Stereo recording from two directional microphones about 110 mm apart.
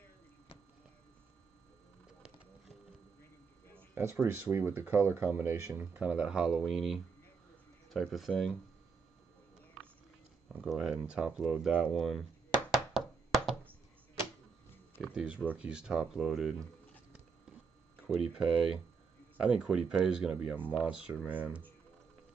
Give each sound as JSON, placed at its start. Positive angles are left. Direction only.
{"t": 3.9, "sound": "speech", "side_deg": -25}
{"t": 10.6, "sound": "speech", "side_deg": -5}
{"t": 12.9, "sound": "a sound", "side_deg": 0}
{"t": 15.0, "sound": "speech", "side_deg": -10}
{"t": 18.0, "sound": "speech", "side_deg": -5}
{"t": 20.5, "sound": "speech", "side_deg": 15}
{"t": 20.8, "sound": "speech", "side_deg": -15}